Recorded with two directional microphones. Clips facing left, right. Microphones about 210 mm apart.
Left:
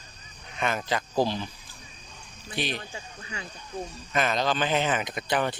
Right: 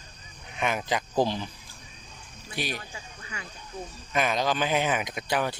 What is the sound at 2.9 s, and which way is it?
Speech, 30° left (ahead or behind).